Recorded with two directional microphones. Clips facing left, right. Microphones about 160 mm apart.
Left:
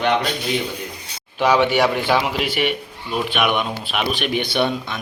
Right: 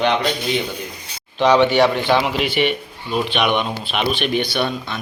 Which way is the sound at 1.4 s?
10° left (ahead or behind).